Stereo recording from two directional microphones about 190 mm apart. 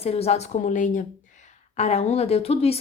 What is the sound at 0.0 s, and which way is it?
A woman's voice, 30° left (ahead or behind).